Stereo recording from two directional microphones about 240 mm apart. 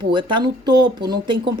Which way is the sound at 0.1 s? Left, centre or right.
Centre.